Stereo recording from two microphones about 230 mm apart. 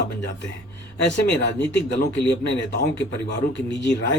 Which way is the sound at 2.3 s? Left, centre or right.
Left.